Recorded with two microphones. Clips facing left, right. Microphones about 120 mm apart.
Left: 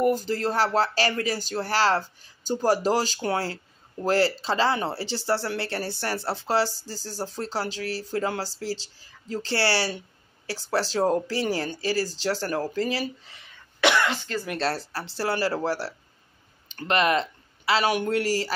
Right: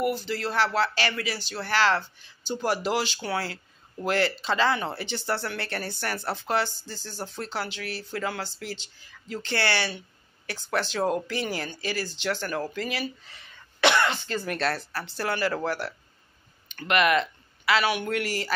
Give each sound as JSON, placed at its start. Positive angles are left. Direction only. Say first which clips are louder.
{"t": 0.1, "sound": "speech", "louder": "left 4 dB", "side_deg": 45}
{"t": 13.7, "sound": "cough", "louder": "even", "side_deg": 5}
{"t": 14.6, "sound": "speech", "louder": "left 1 dB", "side_deg": 30}